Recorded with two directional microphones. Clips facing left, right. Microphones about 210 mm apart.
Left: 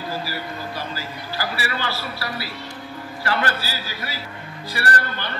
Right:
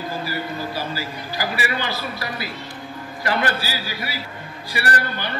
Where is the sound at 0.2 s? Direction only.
Centre (ahead or behind).